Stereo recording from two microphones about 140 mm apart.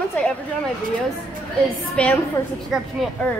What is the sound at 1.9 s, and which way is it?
Speech, 10° left (ahead or behind).